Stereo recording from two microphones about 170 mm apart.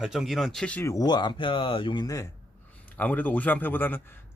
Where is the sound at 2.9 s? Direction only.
10° left (ahead or behind).